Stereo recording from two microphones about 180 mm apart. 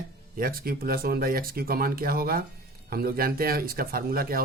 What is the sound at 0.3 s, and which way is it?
Speech, 55° right (ahead or behind).